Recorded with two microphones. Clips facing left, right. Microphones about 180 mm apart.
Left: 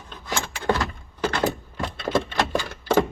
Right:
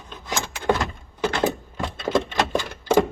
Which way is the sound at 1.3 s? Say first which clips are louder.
Right 1 dB; 20° right (ahead or behind).